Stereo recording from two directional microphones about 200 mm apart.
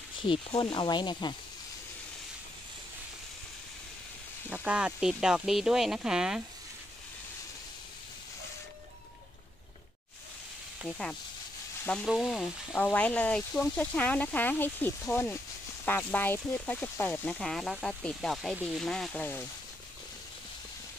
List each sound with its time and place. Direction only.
0.3 s speech: 25° left (ahead or behind)
4.5 s speech: 5° right (ahead or behind)
10.8 s speech: 5° left (ahead or behind)